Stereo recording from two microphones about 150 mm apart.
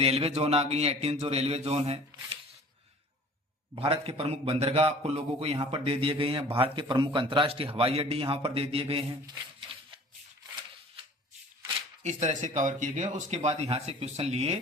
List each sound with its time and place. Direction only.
0.0 s speech: 40° right (ahead or behind)
3.8 s a man's voice: 40° right (ahead or behind)
12.0 s speech: 50° right (ahead or behind)